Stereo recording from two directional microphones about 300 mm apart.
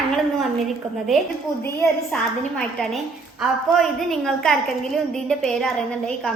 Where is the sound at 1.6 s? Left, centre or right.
Centre.